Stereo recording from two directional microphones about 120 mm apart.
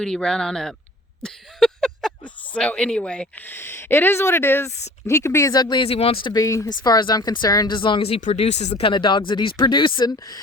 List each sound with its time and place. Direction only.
0.0 s speech: 5° left (ahead or behind)
1.2 s a sound: 5° left (ahead or behind)
2.6 s speech: 10° left (ahead or behind); by 5.9 s 40° left (ahead or behind)
5.9 s speech: 55° left (ahead or behind)
6.3 s speech: 30° left (ahead or behind); by 8.2 s 50° left (ahead or behind)
8.2 s speech: 70° left (ahead or behind)
8.8 s speech: 40° left (ahead or behind)